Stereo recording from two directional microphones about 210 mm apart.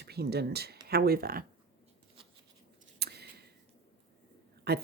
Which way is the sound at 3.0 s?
50° right (ahead or behind).